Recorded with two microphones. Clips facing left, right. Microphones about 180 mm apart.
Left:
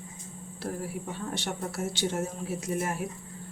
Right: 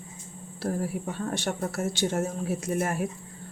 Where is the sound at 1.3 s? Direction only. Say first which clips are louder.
Right 3 dB; 50° right (ahead or behind).